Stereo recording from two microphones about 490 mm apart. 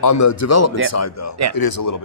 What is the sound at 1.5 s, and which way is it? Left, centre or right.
Speech, left.